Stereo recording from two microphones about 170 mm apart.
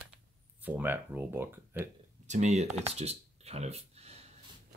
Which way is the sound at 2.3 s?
45° right (ahead or behind).